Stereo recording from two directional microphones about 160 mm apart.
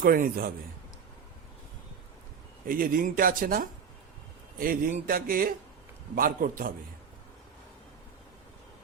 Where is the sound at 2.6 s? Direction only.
60° right (ahead or behind).